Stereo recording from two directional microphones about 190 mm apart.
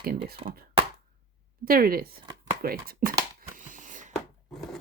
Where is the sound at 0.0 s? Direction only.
50° right (ahead or behind).